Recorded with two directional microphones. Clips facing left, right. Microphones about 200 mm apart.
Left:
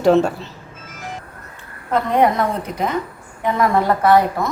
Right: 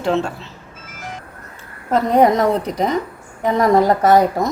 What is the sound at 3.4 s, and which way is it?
A woman's voice, 40° right (ahead or behind).